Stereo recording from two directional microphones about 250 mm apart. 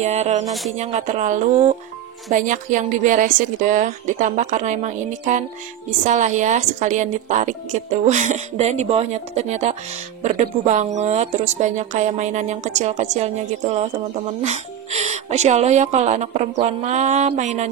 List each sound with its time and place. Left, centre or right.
0.0 s a woman's voice: right
0.5 s speech: centre
0.7 s a woman's voice: right